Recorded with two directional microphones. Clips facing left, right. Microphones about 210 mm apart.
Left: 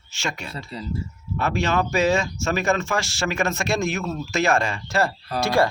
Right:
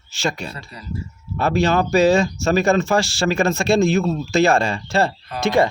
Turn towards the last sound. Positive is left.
turn(degrees=-20)  # may be behind; listen again after turning